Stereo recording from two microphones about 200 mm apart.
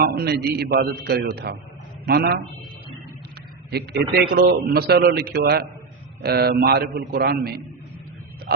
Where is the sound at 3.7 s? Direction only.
55° right (ahead or behind).